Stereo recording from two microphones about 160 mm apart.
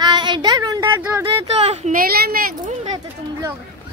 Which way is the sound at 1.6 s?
40° right (ahead or behind).